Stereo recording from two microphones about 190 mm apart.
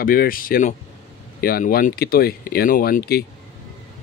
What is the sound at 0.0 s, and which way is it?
Speech, 50° left (ahead or behind).